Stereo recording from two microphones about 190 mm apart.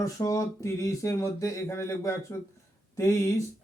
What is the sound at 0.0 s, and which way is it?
A man's voice, 15° left (ahead or behind).